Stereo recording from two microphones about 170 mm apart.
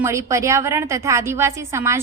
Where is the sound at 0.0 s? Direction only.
15° right (ahead or behind).